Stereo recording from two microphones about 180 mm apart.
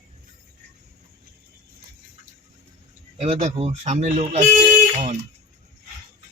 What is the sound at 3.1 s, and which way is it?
Speech, 35° right (ahead or behind).